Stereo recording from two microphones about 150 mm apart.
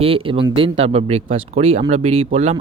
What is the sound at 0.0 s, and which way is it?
Speech, 40° right (ahead or behind).